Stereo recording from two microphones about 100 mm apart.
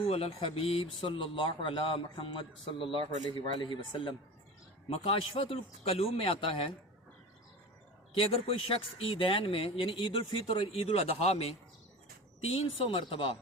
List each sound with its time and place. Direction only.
0.0 s speech: 80° left; by 4.1 s 55° left (ahead or behind)
4.9 s speech: 75° left (ahead or behind)
8.1 s speech: 70° left (ahead or behind)